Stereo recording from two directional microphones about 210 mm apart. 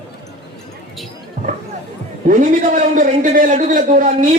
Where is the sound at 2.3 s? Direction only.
40° right (ahead or behind).